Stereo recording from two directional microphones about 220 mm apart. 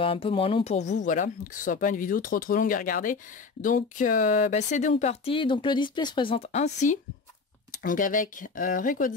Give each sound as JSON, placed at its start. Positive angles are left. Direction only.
{"t": 0.0, "sound": "speech", "side_deg": 25}